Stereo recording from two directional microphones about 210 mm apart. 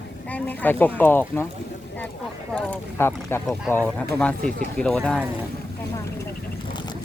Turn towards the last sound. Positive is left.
turn(degrees=5)  # may be behind; listen again after turning